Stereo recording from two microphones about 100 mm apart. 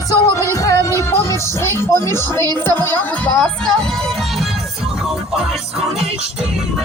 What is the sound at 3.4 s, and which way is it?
Speech, 5° left (ahead or behind).